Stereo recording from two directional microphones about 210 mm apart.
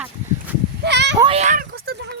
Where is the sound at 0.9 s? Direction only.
55° right (ahead or behind).